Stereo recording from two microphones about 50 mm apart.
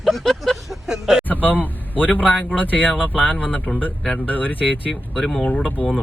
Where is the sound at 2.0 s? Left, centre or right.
Left.